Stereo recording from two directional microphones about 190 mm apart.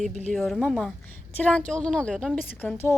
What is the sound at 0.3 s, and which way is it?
A woman's voice, centre (ahead or behind).